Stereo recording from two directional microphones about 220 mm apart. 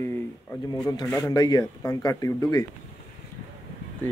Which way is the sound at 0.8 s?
15° left (ahead or behind).